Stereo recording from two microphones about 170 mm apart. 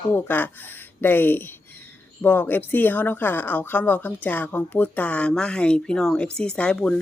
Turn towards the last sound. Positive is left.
turn(degrees=5)  # may be behind; listen again after turning